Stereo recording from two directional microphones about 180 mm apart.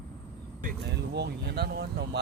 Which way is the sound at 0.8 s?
70° right (ahead or behind).